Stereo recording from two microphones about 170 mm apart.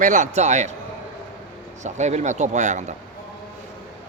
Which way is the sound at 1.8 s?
45° right (ahead or behind).